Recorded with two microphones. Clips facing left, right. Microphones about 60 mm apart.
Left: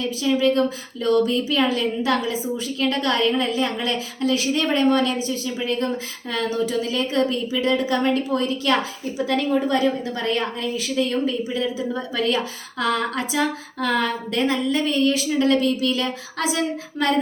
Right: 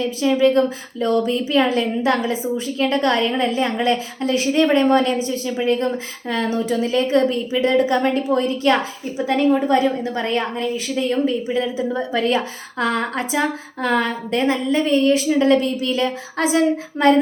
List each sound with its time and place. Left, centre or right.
0.0 s a woman's voice: right
6.5 s a woman's voice: right